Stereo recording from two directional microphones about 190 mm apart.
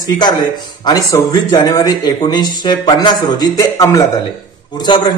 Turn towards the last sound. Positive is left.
turn(degrees=25)  # may be behind; listen again after turning